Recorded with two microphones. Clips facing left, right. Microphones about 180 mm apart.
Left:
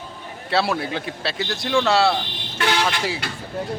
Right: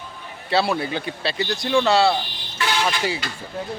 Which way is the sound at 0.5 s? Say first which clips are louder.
Right 1 dB; centre (ahead or behind).